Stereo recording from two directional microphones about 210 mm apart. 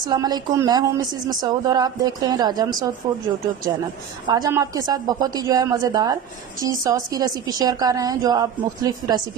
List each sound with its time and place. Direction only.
0.1 s speech: 20° right (ahead or behind)
4.3 s a woman's voice: 15° right (ahead or behind)